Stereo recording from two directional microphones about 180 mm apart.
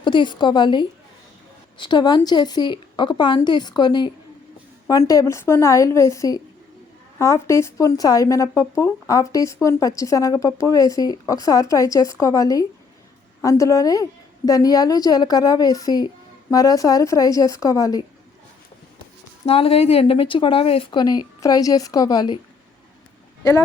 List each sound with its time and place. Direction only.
0.0 s a woman's voice: 25° left (ahead or behind)
19.5 s speech: 35° left (ahead or behind)
23.4 s speech: 15° left (ahead or behind)